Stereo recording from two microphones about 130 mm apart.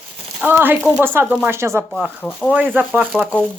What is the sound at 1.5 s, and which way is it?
Speech, 20° right (ahead or behind).